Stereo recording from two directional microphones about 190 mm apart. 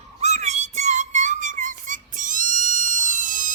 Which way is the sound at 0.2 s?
35° right (ahead or behind).